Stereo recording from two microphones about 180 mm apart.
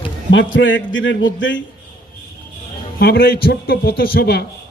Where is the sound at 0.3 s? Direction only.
90° left.